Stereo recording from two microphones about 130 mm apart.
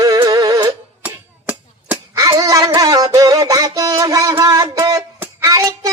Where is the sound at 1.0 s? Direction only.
10° right (ahead or behind).